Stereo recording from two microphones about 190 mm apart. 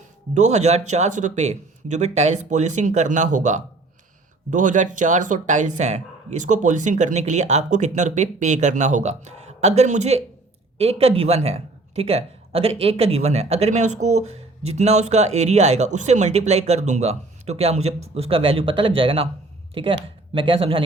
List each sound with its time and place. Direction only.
0.3 s speech: 35° right (ahead or behind)